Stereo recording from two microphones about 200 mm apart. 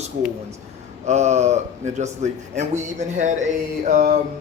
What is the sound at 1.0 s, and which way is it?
Speech, 35° right (ahead or behind).